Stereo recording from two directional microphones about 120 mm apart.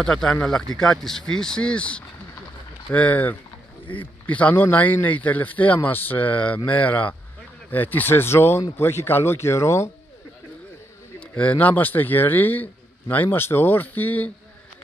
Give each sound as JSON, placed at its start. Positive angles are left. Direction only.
{"t": 0.0, "sound": "speech", "side_deg": 5}
{"t": 11.1, "sound": "speech", "side_deg": 10}